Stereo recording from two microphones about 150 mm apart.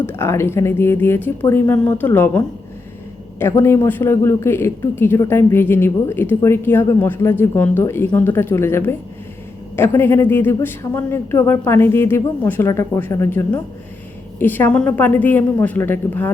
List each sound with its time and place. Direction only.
0.0 s speech: 15° left (ahead or behind)